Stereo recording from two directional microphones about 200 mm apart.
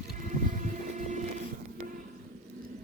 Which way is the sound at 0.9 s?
35° right (ahead or behind).